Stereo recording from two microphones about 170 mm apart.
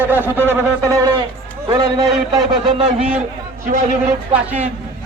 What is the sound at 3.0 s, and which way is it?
A man's voice, 5° right (ahead or behind).